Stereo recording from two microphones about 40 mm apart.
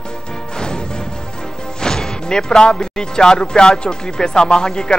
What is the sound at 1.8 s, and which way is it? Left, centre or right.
Speech, centre.